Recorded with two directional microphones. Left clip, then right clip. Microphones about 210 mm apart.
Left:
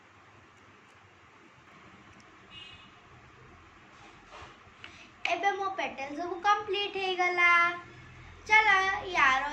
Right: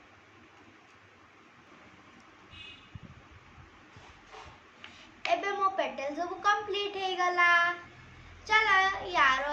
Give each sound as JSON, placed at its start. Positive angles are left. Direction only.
{"t": 5.4, "sound": "a woman's voice", "side_deg": -15}